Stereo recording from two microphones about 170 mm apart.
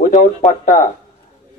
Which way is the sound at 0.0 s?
50° left (ahead or behind).